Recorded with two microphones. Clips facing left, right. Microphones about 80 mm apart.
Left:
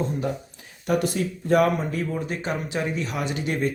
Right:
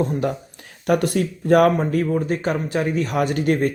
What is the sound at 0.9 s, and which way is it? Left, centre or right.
Speech, right.